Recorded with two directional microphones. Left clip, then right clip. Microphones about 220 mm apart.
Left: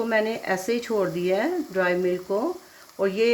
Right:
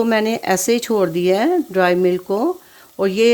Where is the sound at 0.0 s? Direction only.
55° right (ahead or behind).